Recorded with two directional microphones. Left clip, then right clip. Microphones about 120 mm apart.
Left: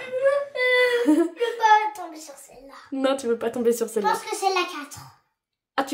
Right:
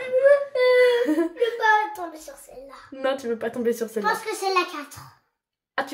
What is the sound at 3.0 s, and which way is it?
Speech, 30° left (ahead or behind).